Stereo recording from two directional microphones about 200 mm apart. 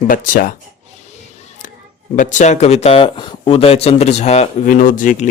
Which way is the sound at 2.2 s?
40° left (ahead or behind).